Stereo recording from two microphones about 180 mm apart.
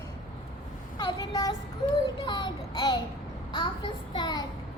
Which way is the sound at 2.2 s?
25° left (ahead or behind).